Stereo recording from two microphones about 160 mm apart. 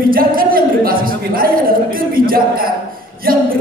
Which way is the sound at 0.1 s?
65° right (ahead or behind).